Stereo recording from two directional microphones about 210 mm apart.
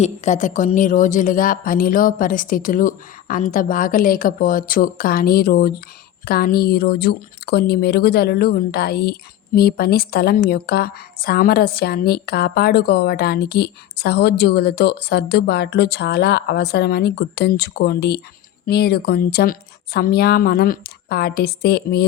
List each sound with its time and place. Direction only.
0.0 s a woman's voice: 35° left (ahead or behind)